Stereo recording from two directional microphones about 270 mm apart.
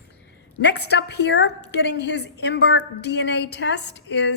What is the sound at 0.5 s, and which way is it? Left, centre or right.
A woman's voice, left.